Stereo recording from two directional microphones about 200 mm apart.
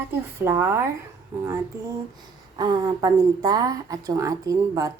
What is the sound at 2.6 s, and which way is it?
A woman's voice, 20° right (ahead or behind).